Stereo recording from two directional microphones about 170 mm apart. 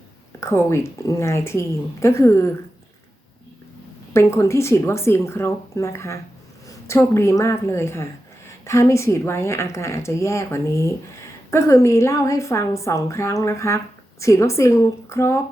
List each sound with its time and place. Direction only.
0.3 s speech: 15° left (ahead or behind)
4.1 s speech: 15° left (ahead or behind)